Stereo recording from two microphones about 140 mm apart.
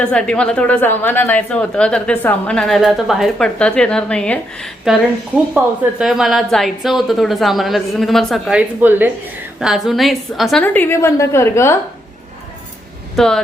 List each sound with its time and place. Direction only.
0.0 s a woman's voice: 5° left (ahead or behind)
6.0 s speech: centre (ahead or behind)
10.6 s a woman's voice: 15° left (ahead or behind)
13.1 s speech: 5° left (ahead or behind)